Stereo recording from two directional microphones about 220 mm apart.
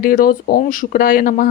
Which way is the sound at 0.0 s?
40° left (ahead or behind).